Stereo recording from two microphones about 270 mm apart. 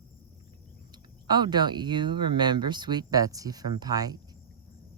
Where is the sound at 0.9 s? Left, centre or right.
Centre.